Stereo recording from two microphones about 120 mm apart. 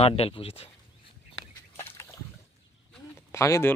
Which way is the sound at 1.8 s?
20° left (ahead or behind).